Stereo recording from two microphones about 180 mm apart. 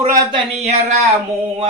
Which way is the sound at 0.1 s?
25° right (ahead or behind).